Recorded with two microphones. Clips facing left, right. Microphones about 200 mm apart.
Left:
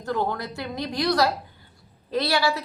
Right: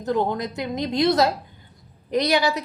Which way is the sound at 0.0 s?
20° right (ahead or behind).